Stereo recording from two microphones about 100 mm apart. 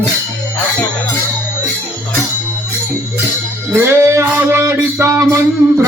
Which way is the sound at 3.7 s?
20° right (ahead or behind).